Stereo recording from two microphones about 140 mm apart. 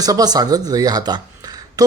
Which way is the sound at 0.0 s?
25° right (ahead or behind).